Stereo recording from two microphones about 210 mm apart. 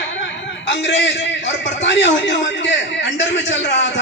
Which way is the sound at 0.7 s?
55° left (ahead or behind).